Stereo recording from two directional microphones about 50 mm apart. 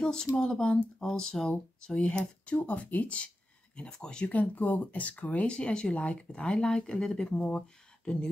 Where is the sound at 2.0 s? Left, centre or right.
Left.